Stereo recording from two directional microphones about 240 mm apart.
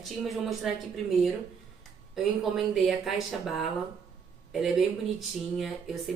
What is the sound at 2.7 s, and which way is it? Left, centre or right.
Speech, centre.